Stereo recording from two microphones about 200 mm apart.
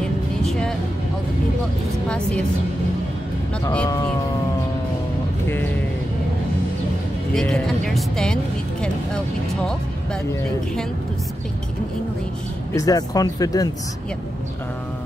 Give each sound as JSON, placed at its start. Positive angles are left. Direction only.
{"t": 0.5, "sound": "music", "side_deg": 0}
{"t": 2.0, "sound": "speech", "side_deg": 5}
{"t": 7.3, "sound": "speech", "side_deg": 5}
{"t": 12.7, "sound": "speech", "side_deg": 20}